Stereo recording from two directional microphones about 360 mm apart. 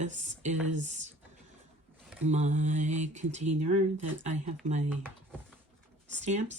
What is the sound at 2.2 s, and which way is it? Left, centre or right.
Speech, centre.